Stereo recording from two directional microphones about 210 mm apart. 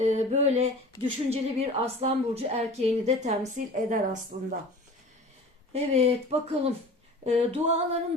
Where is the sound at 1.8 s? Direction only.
30° right (ahead or behind).